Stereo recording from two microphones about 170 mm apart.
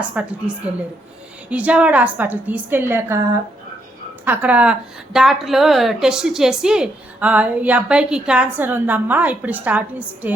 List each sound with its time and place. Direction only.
0.1 s a woman's voice: 10° right (ahead or behind)
4.3 s a woman's voice: 10° right (ahead or behind)